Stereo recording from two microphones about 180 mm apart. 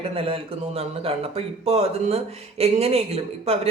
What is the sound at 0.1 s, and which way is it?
A man's voice, 35° right (ahead or behind).